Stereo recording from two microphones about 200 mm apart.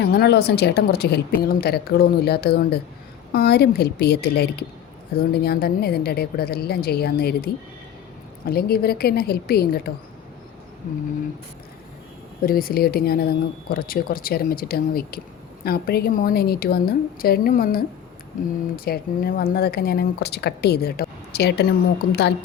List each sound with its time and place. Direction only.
0.0 s speech: 50° left (ahead or behind)
12.5 s speech: 45° left (ahead or behind)
18.9 s speech: 50° left (ahead or behind)